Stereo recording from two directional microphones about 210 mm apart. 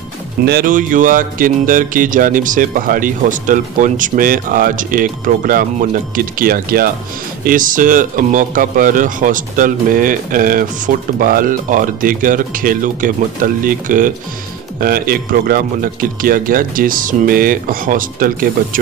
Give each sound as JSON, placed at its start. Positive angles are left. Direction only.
{"t": 0.4, "sound": "a man's voice", "side_deg": -45}